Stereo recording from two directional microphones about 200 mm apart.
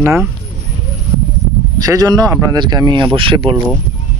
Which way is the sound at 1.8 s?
20° right (ahead or behind).